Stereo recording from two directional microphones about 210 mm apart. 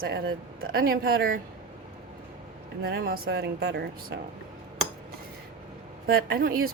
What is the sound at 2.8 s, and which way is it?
Speech, 50° right (ahead or behind).